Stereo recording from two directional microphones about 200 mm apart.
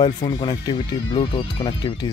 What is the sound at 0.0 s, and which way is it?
Speech, 20° left (ahead or behind).